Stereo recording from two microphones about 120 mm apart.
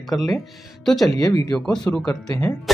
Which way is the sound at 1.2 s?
30° left (ahead or behind).